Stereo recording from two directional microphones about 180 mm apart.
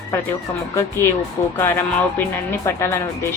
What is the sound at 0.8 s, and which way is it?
Speech, 15° left (ahead or behind).